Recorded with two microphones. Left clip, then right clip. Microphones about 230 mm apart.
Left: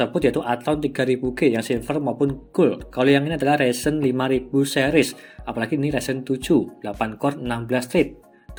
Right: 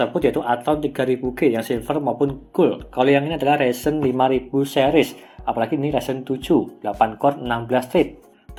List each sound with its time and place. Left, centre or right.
0.0 s speech: left